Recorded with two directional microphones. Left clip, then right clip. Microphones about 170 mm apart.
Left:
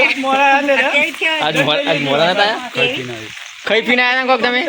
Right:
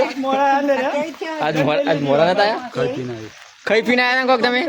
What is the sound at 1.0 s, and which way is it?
Speech, 10° right (ahead or behind).